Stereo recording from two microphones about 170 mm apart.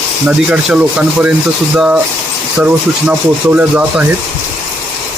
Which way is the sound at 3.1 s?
10° right (ahead or behind).